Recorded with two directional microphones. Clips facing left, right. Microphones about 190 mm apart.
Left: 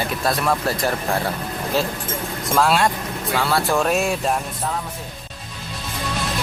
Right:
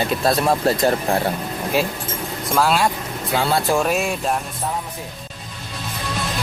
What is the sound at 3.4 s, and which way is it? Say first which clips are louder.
Speech: right 1 dB; 20° right (ahead or behind).